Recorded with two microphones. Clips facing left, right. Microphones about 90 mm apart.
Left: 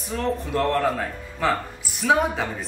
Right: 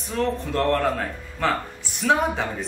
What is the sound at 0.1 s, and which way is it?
Speech, 5° left (ahead or behind).